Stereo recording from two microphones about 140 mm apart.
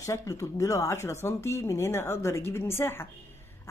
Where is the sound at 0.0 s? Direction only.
25° left (ahead or behind).